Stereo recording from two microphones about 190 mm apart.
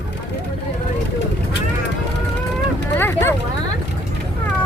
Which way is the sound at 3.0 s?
10° left (ahead or behind).